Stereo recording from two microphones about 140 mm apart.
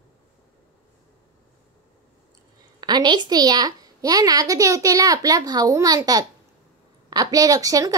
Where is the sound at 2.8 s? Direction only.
30° right (ahead or behind).